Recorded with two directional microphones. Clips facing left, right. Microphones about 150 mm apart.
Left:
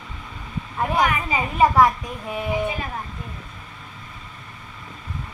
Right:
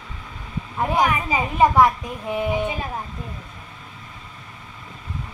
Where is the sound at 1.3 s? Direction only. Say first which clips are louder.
Right 1 dB; 15° right (ahead or behind).